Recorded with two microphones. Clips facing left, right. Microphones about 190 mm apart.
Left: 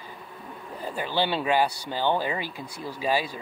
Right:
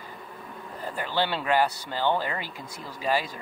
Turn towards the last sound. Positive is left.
turn(degrees=15)  # may be behind; listen again after turning